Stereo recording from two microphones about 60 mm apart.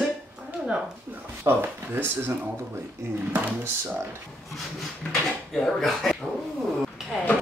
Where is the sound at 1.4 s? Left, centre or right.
Right.